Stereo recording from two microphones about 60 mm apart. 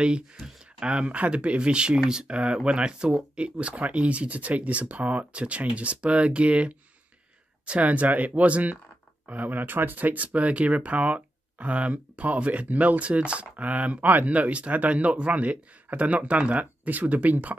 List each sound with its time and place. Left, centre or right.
0.7 s speech: centre